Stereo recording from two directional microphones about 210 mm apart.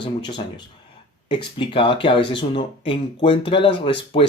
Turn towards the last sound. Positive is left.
turn(degrees=25)  # may be behind; listen again after turning